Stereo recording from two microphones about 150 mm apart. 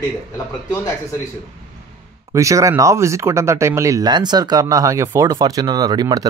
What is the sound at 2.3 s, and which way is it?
Speech, 20° right (ahead or behind).